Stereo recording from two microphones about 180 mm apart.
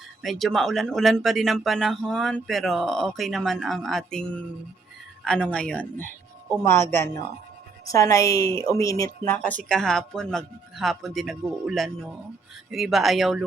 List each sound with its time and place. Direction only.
0.2 s a woman's voice: centre (ahead or behind)